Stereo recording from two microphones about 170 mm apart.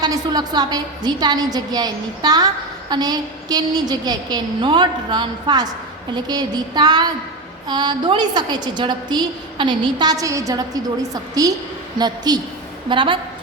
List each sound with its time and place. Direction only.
0.0 s a woman's voice: 25° right (ahead or behind)